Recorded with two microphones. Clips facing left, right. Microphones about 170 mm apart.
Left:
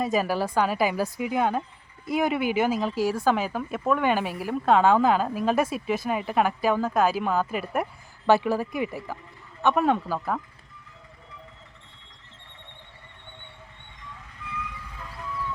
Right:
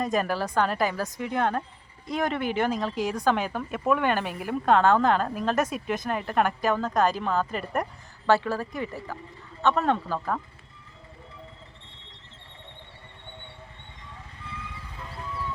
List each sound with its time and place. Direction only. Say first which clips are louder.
0.0 s speech: left 2 dB; 5° left (ahead or behind)
14.4 s vehicle: left 3 dB; 30° right (ahead or behind)